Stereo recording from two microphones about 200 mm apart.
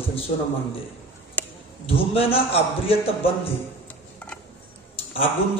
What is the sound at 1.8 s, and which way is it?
A man's voice, 30° left (ahead or behind).